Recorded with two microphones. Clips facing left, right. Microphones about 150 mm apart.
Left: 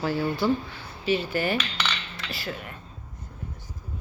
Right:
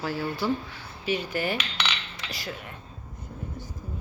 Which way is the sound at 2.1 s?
20° right (ahead or behind).